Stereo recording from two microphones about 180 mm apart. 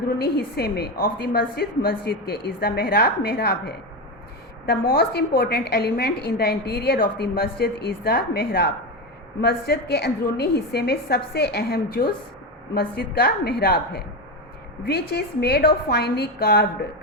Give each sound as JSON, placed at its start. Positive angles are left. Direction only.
{"t": 0.2, "sound": "a woman's voice", "side_deg": 60}